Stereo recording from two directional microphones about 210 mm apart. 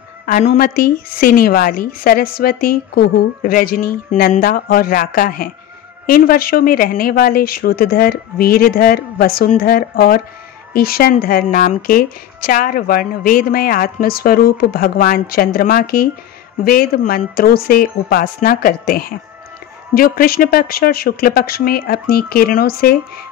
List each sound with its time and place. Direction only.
0.3 s a woman's voice: 30° left (ahead or behind)
0.6 s a woman's voice: 45° left (ahead or behind)